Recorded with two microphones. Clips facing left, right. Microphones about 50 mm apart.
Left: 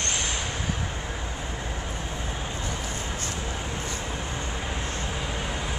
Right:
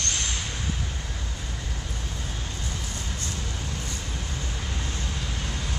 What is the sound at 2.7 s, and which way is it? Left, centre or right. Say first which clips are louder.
Vehicle: left 3 dB; left.